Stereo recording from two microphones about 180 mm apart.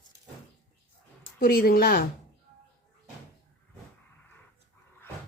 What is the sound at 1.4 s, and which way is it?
Speech, 55° left (ahead or behind).